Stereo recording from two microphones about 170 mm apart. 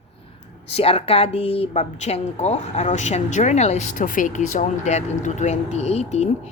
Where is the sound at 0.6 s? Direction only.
35° left (ahead or behind).